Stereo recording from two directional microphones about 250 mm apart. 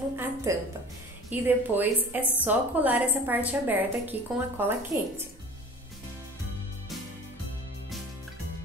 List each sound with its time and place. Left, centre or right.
0.1 s a woman's voice: centre